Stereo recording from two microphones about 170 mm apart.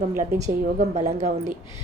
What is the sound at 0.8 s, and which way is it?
Speech, 45° right (ahead or behind).